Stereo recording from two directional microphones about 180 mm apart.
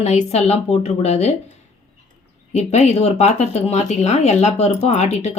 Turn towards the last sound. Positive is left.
turn(degrees=40)  # may be behind; listen again after turning